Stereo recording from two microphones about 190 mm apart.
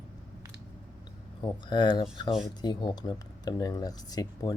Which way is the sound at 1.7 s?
25° left (ahead or behind).